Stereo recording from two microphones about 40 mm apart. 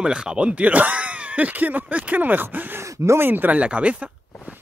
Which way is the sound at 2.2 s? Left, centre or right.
Right.